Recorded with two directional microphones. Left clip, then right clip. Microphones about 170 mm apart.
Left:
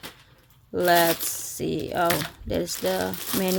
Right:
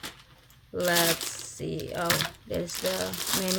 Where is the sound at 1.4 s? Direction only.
40° left (ahead or behind).